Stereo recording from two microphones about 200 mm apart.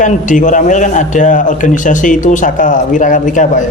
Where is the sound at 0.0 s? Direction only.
40° left (ahead or behind).